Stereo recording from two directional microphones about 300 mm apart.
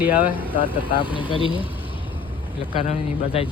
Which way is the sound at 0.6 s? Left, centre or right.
Centre.